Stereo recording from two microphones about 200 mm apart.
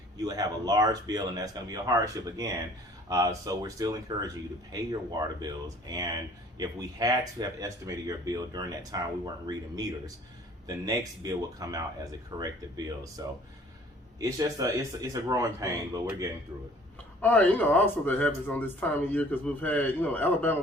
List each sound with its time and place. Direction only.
0.2 s speech: 20° right (ahead or behind)
5.4 s speech: 20° right (ahead or behind)
17.2 s a man's voice: 10° left (ahead or behind)